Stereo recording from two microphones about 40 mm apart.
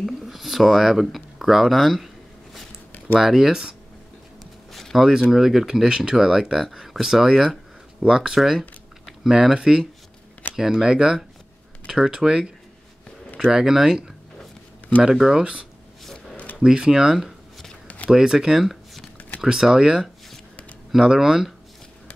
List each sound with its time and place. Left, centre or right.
0.0 s speech: centre
3.2 s speech: centre
4.9 s speech: centre
15.1 s speech: centre
16.0 s a sound: centre
16.6 s speech: centre
17.8 s a sound: left
18.1 s speech: centre
21.1 s speech: centre